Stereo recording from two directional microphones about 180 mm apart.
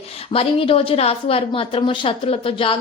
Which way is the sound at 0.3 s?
30° left (ahead or behind).